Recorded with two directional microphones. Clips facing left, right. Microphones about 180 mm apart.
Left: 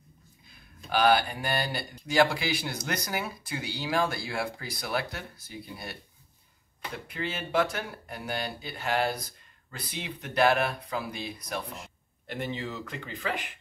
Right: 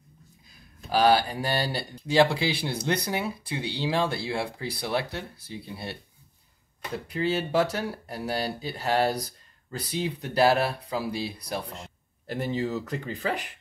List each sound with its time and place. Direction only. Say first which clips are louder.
0.8 s speech: right 2 dB; 35° right (ahead or behind)
7.1 s speech: right 7 dB; 35° right (ahead or behind)